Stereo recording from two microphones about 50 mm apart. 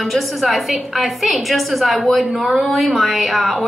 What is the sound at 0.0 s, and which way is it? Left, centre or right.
A woman's voice, centre.